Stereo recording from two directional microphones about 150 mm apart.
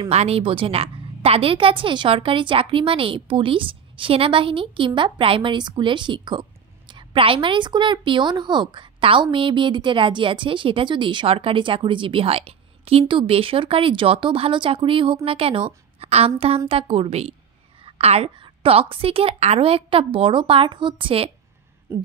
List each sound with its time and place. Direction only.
0.0 s a woman's voice: 45° right (ahead or behind)
21.9 s speech: 15° right (ahead or behind)